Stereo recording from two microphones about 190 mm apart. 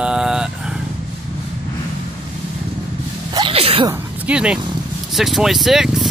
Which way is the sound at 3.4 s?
30° right (ahead or behind).